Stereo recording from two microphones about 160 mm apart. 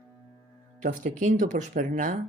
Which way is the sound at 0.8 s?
50° right (ahead or behind).